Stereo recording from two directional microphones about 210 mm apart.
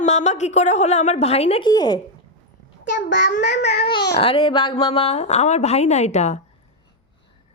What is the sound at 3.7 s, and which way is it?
A child's voice, 30° left (ahead or behind).